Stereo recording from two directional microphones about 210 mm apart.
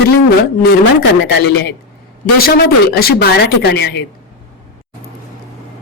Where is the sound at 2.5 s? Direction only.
45° left (ahead or behind).